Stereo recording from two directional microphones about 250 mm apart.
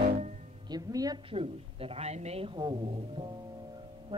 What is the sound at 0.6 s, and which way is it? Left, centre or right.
A woman's voice, centre.